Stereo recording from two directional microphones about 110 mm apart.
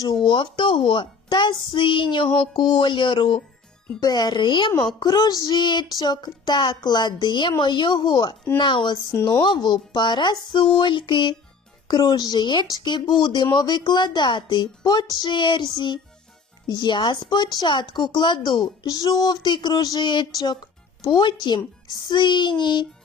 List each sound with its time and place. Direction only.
0.0 s speech: 40° left (ahead or behind)
9.1 s speech: 25° left (ahead or behind)
9.4 s speech: 45° left (ahead or behind)